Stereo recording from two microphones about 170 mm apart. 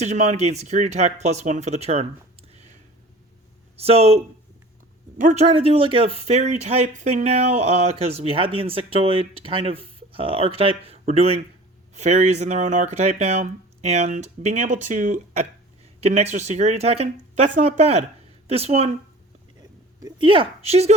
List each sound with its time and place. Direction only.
0.0 s speech: 40° right (ahead or behind)
2.5 s a sound: 40° right (ahead or behind)
3.8 s speech: 35° right (ahead or behind)
20.0 s speech: 25° right (ahead or behind)